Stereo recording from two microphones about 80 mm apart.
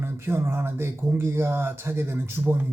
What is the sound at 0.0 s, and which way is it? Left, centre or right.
Speech, right.